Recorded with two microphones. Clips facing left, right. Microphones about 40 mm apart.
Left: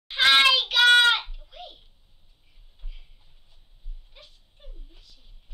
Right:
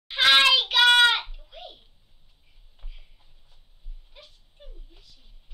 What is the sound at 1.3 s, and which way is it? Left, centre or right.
Babbling, centre.